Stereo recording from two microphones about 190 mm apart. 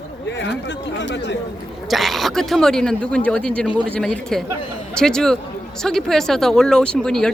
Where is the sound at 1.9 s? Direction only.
Centre (ahead or behind).